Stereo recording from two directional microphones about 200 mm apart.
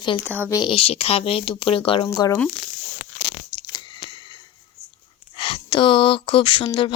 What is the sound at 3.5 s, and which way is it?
Chewing, 20° left (ahead or behind).